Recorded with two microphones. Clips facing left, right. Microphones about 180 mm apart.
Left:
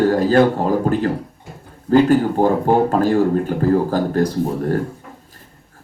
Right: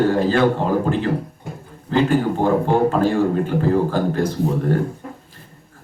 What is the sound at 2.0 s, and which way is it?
Speech, 40° left (ahead or behind).